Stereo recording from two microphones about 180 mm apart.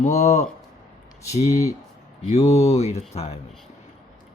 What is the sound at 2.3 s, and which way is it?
Speech, 35° left (ahead or behind).